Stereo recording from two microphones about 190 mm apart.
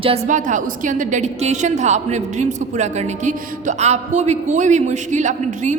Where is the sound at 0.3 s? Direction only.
40° right (ahead or behind).